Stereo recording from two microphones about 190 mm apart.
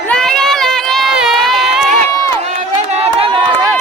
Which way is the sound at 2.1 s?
15° left (ahead or behind).